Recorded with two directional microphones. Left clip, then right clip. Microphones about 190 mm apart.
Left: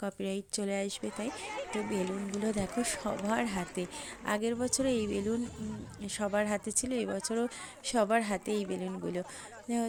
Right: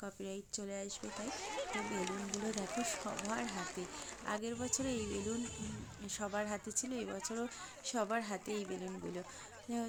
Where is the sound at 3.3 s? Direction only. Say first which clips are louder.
Left 8 dB; 40° left (ahead or behind).